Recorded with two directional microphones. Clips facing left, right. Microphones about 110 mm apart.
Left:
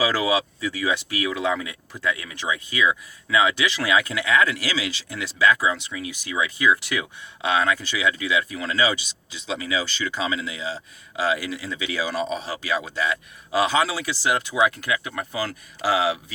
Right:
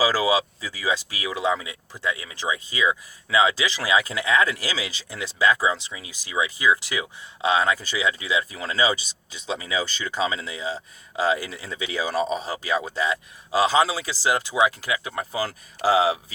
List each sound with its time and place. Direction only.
0.0 s speech: 30° right (ahead or behind)